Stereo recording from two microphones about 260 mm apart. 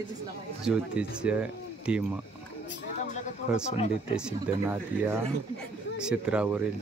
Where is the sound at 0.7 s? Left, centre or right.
Centre.